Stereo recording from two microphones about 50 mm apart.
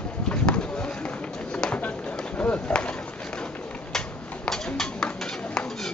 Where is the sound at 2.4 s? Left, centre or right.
Left.